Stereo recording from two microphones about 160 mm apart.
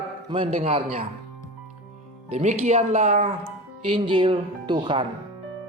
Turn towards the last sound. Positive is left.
turn(degrees=-30)  # may be behind; listen again after turning